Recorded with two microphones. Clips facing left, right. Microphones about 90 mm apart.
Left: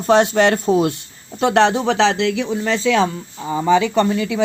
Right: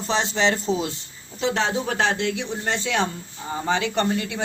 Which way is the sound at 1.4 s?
65° left (ahead or behind).